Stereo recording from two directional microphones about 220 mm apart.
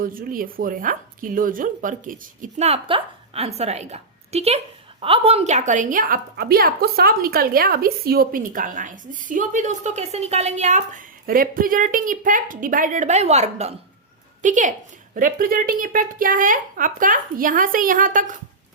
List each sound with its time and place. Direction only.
0.0 s a woman's voice: 40° right (ahead or behind)